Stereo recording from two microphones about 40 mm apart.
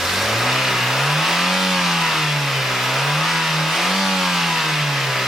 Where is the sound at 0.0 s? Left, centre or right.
Centre.